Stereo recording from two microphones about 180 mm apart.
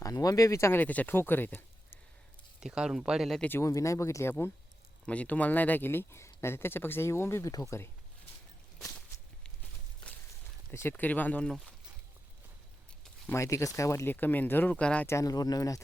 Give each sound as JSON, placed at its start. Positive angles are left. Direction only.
{"t": 0.0, "sound": "speech", "side_deg": 20}
{"t": 2.6, "sound": "speech", "side_deg": -5}
{"t": 10.7, "sound": "speech", "side_deg": 15}
{"t": 13.2, "sound": "speech", "side_deg": 15}